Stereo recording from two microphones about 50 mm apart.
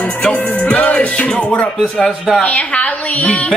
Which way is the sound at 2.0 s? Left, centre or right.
Centre.